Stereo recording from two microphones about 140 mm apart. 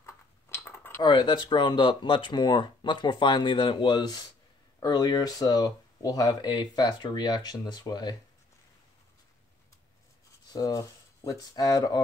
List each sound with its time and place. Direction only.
0.0 s a sound: 15° left (ahead or behind)
1.0 s speech: 35° left (ahead or behind)
10.5 s speech: 25° left (ahead or behind)